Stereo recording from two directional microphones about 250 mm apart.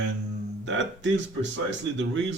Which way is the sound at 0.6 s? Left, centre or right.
Right.